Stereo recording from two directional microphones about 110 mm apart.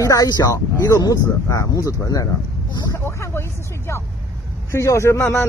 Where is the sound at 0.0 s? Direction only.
30° left (ahead or behind).